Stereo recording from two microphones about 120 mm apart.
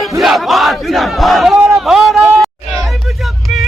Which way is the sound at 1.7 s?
5° right (ahead or behind).